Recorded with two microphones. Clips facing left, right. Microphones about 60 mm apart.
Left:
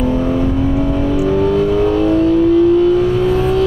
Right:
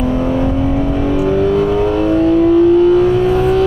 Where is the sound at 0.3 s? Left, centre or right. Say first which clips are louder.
Even; right.